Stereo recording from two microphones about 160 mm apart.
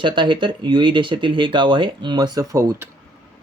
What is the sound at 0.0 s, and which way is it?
Speech, 30° right (ahead or behind).